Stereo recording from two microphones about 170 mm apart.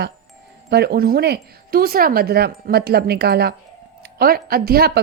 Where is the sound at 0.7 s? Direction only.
70° right (ahead or behind).